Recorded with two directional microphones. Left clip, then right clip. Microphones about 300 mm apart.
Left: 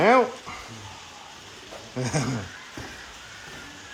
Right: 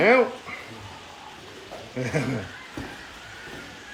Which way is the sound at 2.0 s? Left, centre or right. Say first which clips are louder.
Right 1 dB; centre.